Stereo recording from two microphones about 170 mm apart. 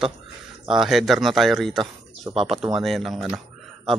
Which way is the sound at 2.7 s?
Centre (ahead or behind).